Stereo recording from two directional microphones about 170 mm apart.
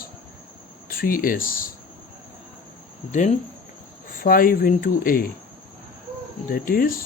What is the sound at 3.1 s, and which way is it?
Speech, 45° left (ahead or behind).